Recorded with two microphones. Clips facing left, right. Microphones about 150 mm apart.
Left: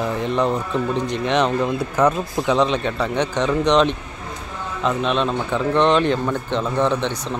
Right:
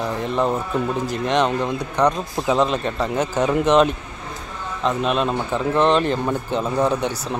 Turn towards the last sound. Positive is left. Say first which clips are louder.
# even
turn(degrees=-10)  # may be behind; listen again after turning